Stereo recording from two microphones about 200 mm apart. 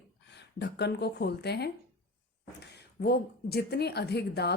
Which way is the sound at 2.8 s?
50° left (ahead or behind).